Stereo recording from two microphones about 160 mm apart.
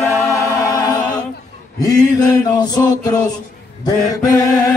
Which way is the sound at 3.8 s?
20° left (ahead or behind).